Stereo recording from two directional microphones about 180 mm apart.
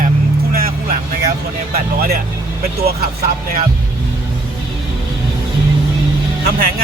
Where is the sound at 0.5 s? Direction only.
55° right (ahead or behind).